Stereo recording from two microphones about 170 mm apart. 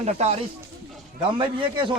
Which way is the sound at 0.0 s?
40° right (ahead or behind).